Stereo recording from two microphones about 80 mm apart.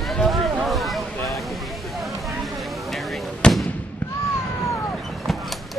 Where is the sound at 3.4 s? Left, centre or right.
Centre.